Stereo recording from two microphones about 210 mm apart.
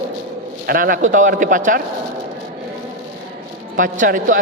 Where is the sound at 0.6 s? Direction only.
45° right (ahead or behind).